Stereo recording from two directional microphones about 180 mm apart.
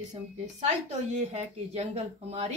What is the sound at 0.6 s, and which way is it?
Speech, 40° right (ahead or behind).